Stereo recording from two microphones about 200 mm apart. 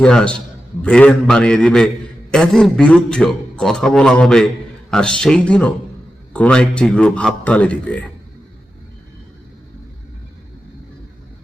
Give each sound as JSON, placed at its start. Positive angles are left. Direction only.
{"t": 0.0, "sound": "a man's voice", "side_deg": 5}